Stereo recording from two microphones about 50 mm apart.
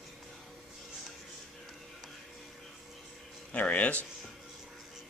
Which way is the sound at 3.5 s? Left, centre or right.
Left.